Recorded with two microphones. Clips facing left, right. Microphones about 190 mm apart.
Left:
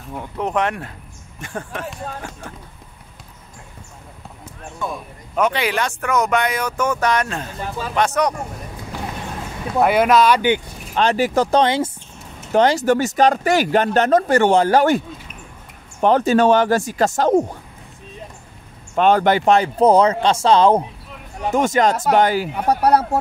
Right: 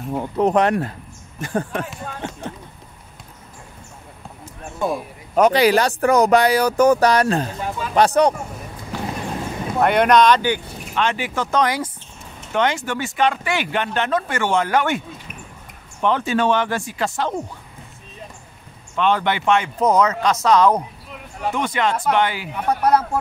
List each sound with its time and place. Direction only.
0.1 s speech: 35° right (ahead or behind)
2.2 s speech: 20° right (ahead or behind)
4.7 s speech: 40° right (ahead or behind)
9.8 s speech: 5° left (ahead or behind)
11.0 s speech: 40° left (ahead or behind)
11.6 s speech: 25° left (ahead or behind)
12.5 s speech: 35° left (ahead or behind)
16.0 s speech: 40° left (ahead or behind)
18.9 s speech: 45° left (ahead or behind)
21.5 s speech: 45° left (ahead or behind)